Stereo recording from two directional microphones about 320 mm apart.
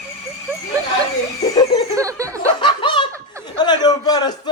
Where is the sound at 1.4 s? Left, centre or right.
Centre.